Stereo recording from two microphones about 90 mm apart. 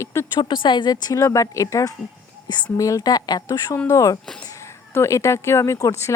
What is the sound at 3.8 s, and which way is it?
Speech, 35° left (ahead or behind).